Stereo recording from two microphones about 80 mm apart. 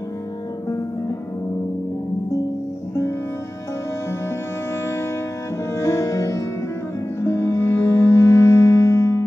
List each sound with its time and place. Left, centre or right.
5.8 s music: left